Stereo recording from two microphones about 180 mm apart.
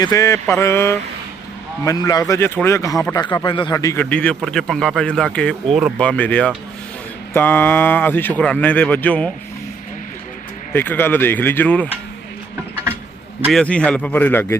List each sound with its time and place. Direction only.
0.0 s speech: 15° left (ahead or behind)
4.0 s a man's voice: 5° left (ahead or behind)
10.8 s speech: 10° left (ahead or behind)
13.5 s speech: 5° left (ahead or behind)